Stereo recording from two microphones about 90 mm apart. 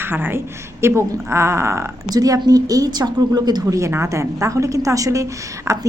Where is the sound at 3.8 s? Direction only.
30° right (ahead or behind).